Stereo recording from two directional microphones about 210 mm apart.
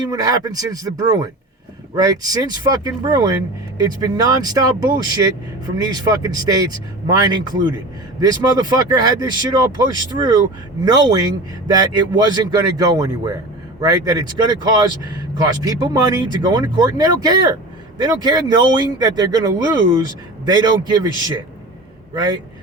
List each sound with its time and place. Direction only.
0.1 s speech: 20° right (ahead or behind)
8.2 s a man's voice: 20° right (ahead or behind)